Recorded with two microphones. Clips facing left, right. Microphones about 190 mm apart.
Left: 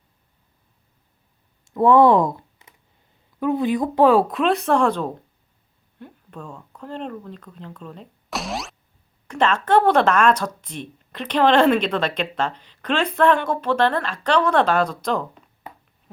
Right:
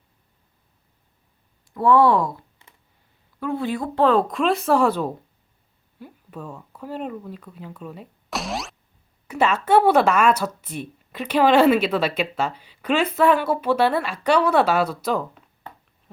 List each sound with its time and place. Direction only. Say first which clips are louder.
1.7 s a woman's voice: left 3 dB; 20° left (ahead or behind); by 15.4 s 5° right (ahead or behind)